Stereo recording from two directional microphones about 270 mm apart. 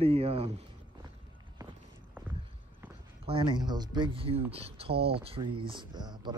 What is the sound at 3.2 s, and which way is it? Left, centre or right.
Speech, centre.